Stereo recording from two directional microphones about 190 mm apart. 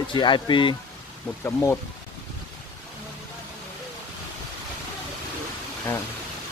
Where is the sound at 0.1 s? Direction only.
25° left (ahead or behind).